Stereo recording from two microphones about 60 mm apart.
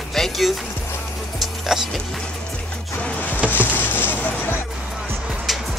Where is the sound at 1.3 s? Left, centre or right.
Centre.